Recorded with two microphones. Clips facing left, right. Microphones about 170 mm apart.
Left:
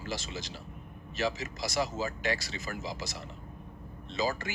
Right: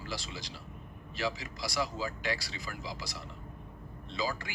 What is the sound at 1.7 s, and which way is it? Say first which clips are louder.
Speech: left 2 dB; 20° left (ahead or behind).